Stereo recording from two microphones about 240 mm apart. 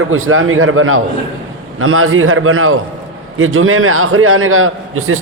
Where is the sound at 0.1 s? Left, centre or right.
Right.